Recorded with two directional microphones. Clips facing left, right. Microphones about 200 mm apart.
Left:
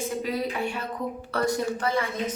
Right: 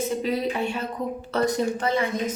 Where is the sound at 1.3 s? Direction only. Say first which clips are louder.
Right 3 dB; 20° right (ahead or behind).